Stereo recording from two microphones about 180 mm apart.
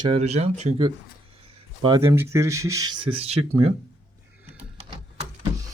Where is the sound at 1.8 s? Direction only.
25° right (ahead or behind).